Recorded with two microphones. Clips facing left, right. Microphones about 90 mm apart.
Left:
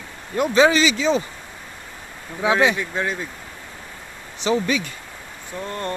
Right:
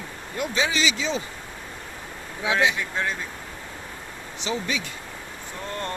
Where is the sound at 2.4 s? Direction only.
45° left (ahead or behind).